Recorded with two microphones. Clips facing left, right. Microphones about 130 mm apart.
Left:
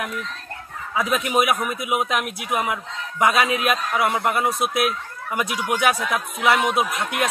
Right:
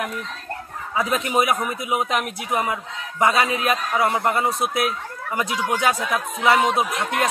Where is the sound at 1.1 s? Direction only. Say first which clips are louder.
Left 1 dB; 10° left (ahead or behind).